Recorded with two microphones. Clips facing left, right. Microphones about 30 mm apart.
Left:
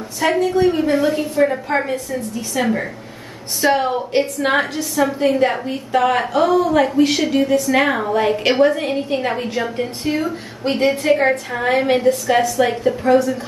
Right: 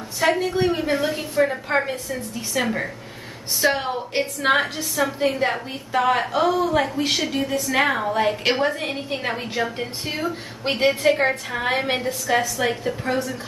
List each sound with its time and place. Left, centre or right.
0.2 s a woman's voice: centre
10.6 s a woman's voice: right
10.9 s a woman's voice: centre
12.1 s a woman's voice: centre
12.4 s a woman's voice: centre